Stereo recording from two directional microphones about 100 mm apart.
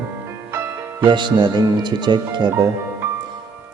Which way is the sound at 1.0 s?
50° right (ahead or behind).